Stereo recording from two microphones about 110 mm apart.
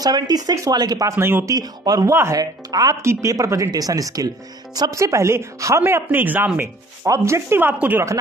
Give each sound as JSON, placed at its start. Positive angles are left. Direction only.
{"t": 0.0, "sound": "speech", "side_deg": -35}
{"t": 1.5, "sound": "speech", "side_deg": -35}